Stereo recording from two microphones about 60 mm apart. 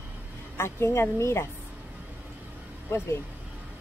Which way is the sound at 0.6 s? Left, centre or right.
Left.